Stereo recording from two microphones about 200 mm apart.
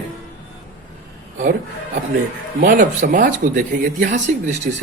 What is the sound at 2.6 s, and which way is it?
Speech, 40° right (ahead or behind).